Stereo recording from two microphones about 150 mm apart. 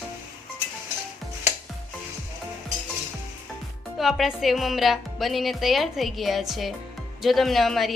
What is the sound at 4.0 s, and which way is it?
Speech, centre (ahead or behind).